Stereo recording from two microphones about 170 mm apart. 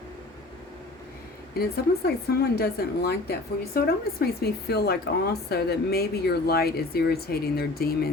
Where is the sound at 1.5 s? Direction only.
65° left (ahead or behind).